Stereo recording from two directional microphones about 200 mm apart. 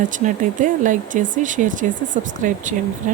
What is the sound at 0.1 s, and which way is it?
Speech, 40° right (ahead or behind).